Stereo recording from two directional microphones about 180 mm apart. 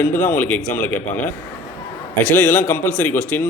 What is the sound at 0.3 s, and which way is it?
Speech, 10° left (ahead or behind).